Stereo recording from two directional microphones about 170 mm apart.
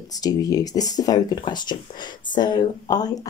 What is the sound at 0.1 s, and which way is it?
Speech, 20° left (ahead or behind).